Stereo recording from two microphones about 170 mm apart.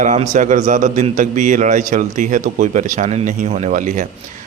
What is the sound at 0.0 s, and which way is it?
A man's voice, 45° right (ahead or behind).